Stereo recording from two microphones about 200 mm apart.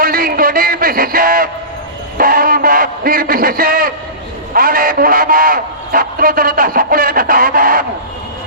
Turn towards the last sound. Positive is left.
turn(degrees=-45)  # may be behind; listen again after turning